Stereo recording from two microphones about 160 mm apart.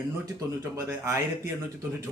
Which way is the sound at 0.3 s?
15° right (ahead or behind).